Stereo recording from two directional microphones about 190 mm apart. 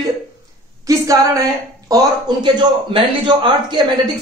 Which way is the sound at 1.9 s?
20° right (ahead or behind).